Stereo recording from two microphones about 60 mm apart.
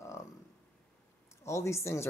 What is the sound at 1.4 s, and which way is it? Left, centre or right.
Speech, left.